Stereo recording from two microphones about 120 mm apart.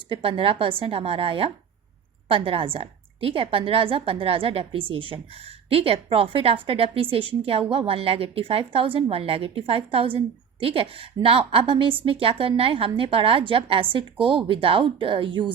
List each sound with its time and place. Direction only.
0.1 s a woman's voice: 50° right (ahead or behind)